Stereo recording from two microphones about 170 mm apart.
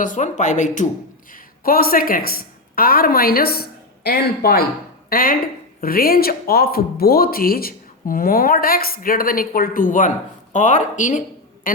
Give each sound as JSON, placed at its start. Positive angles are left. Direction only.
{"t": 0.0, "sound": "speech", "side_deg": 50}
{"t": 1.3, "sound": "a woman's voice", "side_deg": 60}